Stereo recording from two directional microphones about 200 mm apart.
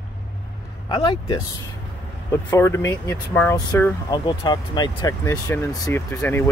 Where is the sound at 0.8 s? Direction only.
25° left (ahead or behind).